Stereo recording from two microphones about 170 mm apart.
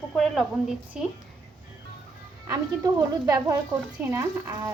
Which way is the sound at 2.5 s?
20° right (ahead or behind).